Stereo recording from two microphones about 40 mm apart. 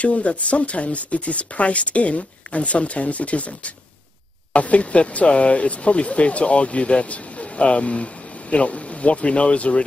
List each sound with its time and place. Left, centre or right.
0.0 s speech: left